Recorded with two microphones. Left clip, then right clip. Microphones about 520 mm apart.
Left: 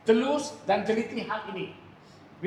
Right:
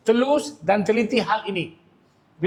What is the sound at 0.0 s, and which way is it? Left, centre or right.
Speech, right.